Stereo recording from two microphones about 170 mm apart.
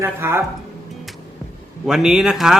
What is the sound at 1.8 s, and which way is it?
Speech, 5° right (ahead or behind).